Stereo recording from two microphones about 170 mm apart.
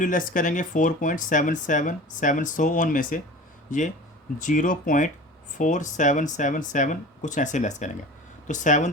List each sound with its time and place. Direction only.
0.0 s speech: 50° left (ahead or behind)